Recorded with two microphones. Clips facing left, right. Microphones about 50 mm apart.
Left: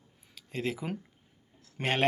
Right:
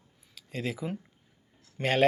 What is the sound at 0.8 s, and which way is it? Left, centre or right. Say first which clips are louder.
Speech: right 1 dB; left.